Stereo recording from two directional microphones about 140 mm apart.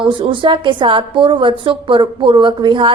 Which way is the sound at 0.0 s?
35° right (ahead or behind).